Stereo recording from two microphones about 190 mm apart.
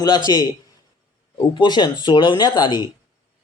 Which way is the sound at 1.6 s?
20° left (ahead or behind).